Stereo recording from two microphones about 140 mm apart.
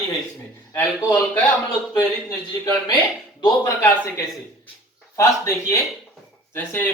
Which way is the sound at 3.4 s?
30° left (ahead or behind).